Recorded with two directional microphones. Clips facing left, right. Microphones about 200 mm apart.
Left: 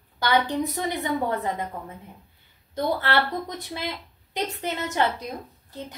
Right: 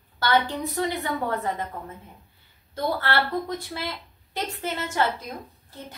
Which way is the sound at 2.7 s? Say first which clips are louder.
Left 1 dB; 20° left (ahead or behind).